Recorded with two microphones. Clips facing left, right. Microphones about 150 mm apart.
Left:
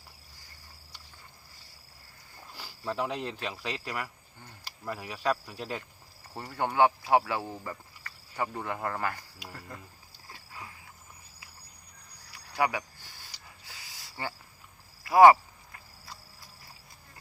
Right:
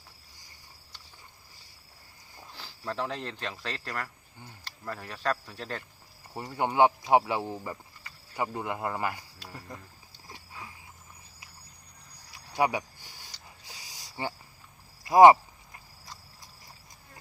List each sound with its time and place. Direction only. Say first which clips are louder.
2.5 s speech: left 1 dB; 10° left (ahead or behind)
6.3 s speech: right 2 dB; 15° right (ahead or behind)
12.3 s a sound: right 2 dB; 20° right (ahead or behind)